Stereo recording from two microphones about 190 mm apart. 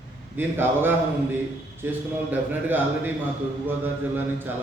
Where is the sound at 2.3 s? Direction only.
10° right (ahead or behind).